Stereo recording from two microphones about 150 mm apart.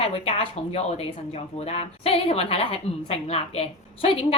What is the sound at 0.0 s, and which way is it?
A woman's voice, 40° left (ahead or behind).